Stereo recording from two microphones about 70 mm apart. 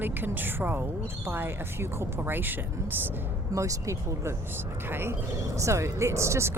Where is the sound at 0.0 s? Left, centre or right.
Right.